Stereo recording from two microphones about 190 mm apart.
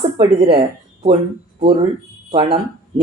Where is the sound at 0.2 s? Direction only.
30° right (ahead or behind).